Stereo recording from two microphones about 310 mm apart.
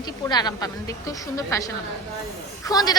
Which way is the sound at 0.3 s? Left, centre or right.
Centre.